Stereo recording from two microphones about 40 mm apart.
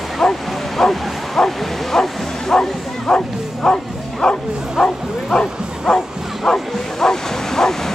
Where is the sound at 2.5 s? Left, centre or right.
Left.